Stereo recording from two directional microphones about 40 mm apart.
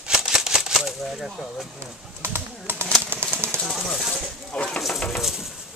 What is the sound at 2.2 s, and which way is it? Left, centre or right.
Pigeon, right.